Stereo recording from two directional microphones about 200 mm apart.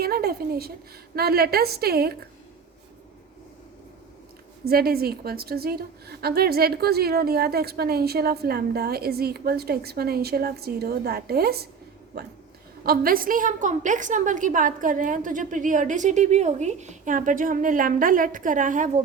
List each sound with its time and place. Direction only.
0.0 s a woman's voice: 50° right (ahead or behind)
4.6 s a woman's voice: 50° right (ahead or behind)